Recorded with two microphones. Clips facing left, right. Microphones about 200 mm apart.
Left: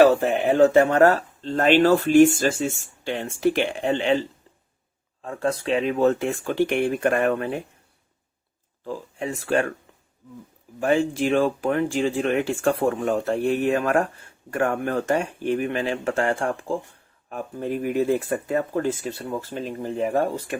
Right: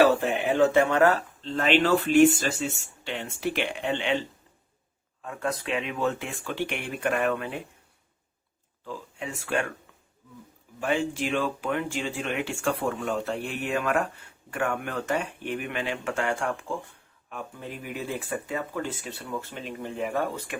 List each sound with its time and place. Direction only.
0.0 s speech: 45° left (ahead or behind)
5.2 s speech: 30° left (ahead or behind)
8.8 s speech: 40° left (ahead or behind)
10.8 s speech: 45° left (ahead or behind)